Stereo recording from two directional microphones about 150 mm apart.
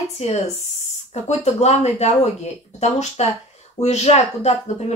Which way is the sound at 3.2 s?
45° left (ahead or behind).